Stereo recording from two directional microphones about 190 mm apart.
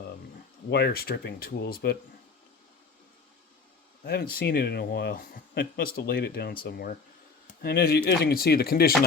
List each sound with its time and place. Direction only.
0.7 s speech: 60° left (ahead or behind)
4.0 s speech: 55° left (ahead or behind)